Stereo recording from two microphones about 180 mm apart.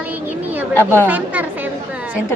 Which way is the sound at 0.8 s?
10° left (ahead or behind).